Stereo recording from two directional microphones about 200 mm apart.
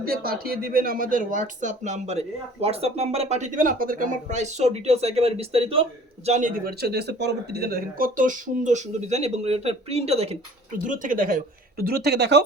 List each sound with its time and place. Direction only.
0.0 s speech: 50° right (ahead or behind)
6.7 s speech: 55° right (ahead or behind); by 10.3 s 30° right (ahead or behind)
10.8 s speech: 40° right (ahead or behind); by 12.4 s 55° right (ahead or behind)